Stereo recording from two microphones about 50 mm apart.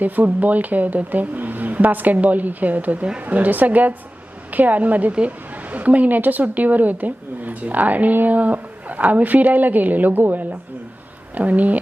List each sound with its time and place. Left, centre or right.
0.0 s a woman's voice: right